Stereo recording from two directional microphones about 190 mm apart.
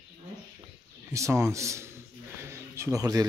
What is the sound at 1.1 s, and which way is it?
A man's voice, 15° right (ahead or behind).